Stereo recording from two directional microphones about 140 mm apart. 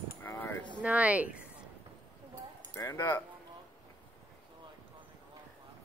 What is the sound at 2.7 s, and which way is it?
Speech, 20° left (ahead or behind).